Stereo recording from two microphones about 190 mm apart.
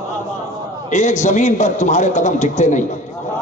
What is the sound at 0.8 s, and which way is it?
A man's voice, 40° left (ahead or behind).